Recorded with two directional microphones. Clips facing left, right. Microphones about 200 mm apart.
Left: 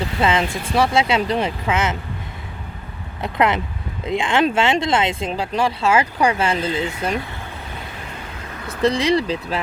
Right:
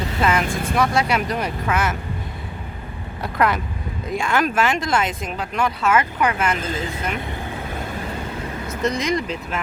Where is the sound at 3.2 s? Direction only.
20° left (ahead or behind).